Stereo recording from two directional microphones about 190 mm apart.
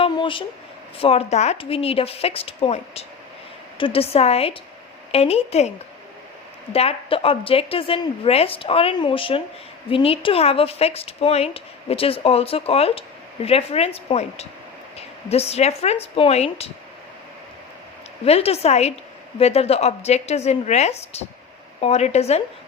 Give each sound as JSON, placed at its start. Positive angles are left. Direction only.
{"t": 0.0, "sound": "a sound", "side_deg": 25}
{"t": 0.9, "sound": "speech", "side_deg": 30}
{"t": 6.7, "sound": "a woman's voice", "side_deg": 30}
{"t": 18.3, "sound": "speech", "side_deg": 30}